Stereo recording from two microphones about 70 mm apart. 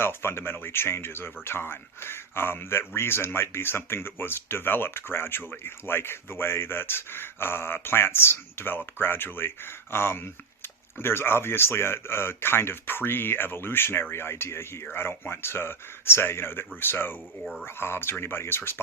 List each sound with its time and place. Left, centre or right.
0.0 s speech: left
17.4 s speech: centre
17.7 s speech: left